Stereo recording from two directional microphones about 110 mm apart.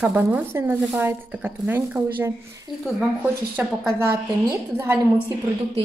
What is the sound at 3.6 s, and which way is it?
Speech, 15° right (ahead or behind).